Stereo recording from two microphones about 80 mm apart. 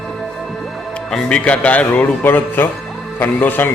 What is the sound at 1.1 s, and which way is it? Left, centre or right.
A man's voice, centre.